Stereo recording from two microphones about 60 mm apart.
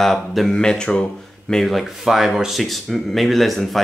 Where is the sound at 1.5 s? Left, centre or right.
Centre.